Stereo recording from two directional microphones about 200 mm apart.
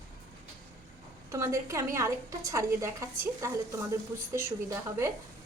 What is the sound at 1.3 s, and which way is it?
A woman's voice, 15° right (ahead or behind).